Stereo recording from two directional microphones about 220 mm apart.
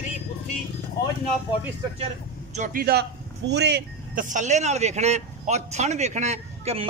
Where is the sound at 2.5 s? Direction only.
40° right (ahead or behind).